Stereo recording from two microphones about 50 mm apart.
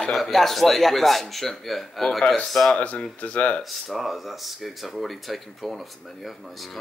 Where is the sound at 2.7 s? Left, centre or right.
Left.